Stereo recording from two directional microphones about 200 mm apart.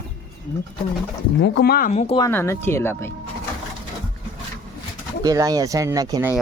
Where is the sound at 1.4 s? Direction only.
55° left (ahead or behind); by 2.2 s 30° left (ahead or behind).